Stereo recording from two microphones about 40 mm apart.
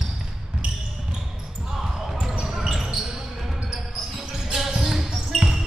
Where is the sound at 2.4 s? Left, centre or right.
Centre.